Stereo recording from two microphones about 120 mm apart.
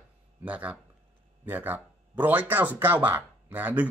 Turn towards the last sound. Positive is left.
turn(degrees=-15)  # may be behind; listen again after turning